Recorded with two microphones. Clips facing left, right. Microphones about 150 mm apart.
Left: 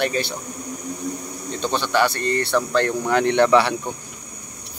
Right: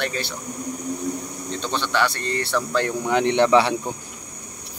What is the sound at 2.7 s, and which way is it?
Speech, 10° right (ahead or behind).